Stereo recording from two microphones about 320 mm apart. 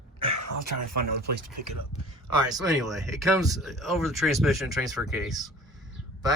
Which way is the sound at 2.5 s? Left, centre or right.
Centre.